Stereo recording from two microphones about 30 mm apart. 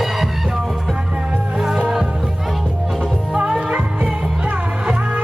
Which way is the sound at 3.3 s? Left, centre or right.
Right.